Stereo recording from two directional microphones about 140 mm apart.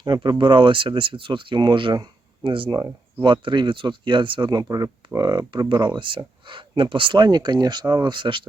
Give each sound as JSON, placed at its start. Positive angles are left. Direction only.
{"t": 0.0, "sound": "speech", "side_deg": -30}